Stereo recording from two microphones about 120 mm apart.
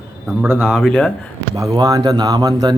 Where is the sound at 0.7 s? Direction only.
Centre (ahead or behind).